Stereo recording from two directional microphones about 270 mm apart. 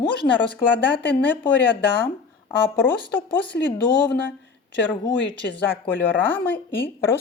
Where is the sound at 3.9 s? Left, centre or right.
Centre.